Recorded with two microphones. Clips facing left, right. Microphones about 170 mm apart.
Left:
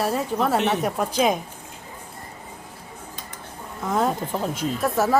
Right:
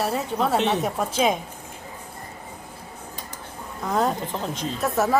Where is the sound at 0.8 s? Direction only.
Centre (ahead or behind).